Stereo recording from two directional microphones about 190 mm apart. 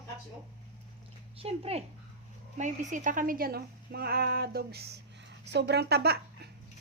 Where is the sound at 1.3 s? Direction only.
30° right (ahead or behind); by 6.1 s 60° right (ahead or behind).